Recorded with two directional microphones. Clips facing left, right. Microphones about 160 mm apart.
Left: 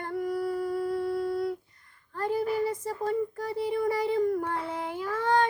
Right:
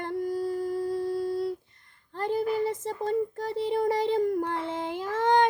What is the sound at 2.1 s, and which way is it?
Child singing, 25° right (ahead or behind).